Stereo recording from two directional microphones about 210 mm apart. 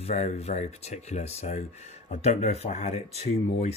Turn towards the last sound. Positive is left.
turn(degrees=30)  # may be behind; listen again after turning